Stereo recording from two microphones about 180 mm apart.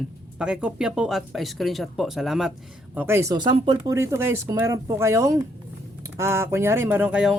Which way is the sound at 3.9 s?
15° right (ahead or behind).